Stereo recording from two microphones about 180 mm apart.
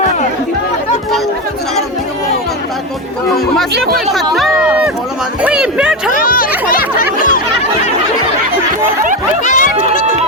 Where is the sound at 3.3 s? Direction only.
Centre (ahead or behind).